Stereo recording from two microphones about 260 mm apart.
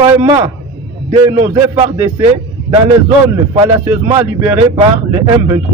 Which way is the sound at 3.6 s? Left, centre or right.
Centre.